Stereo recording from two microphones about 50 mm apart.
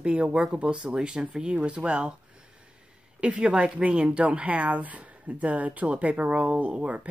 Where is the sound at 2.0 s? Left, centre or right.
Centre.